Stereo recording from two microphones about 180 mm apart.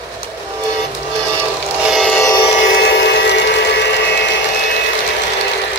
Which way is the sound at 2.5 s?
60° left (ahead or behind).